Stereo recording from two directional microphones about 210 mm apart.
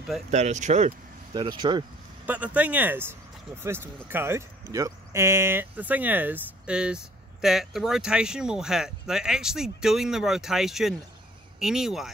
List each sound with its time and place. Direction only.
0.3 s speech: 35° right (ahead or behind)
1.3 s speech: 20° right (ahead or behind)
2.2 s speech: 5° right (ahead or behind)